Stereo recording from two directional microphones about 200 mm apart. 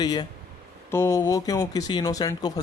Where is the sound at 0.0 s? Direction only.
20° left (ahead or behind).